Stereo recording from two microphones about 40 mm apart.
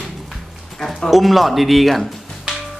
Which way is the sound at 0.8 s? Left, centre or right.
Centre.